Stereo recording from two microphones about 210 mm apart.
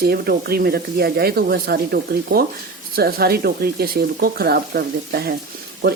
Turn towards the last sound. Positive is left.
turn(degrees=-50)  # may be behind; listen again after turning